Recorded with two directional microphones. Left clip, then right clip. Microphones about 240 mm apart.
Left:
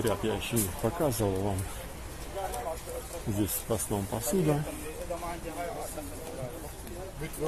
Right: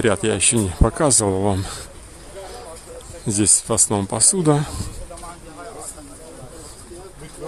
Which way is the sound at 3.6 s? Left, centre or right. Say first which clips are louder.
Right 11 dB; right.